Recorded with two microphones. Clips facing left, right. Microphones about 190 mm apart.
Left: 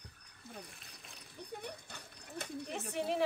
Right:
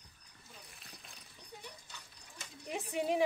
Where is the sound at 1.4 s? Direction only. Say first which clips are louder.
Left 8 dB; 55° left (ahead or behind).